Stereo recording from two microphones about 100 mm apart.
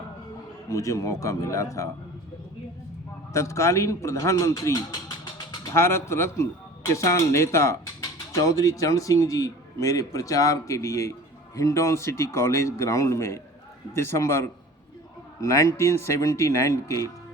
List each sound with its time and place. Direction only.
0.7 s speech: 35° left (ahead or behind)
3.3 s speech: 30° left (ahead or behind)